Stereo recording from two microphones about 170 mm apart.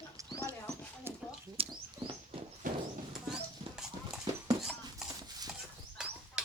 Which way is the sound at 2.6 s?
50° right (ahead or behind).